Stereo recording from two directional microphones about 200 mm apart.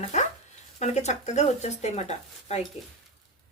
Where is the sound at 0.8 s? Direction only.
35° left (ahead or behind).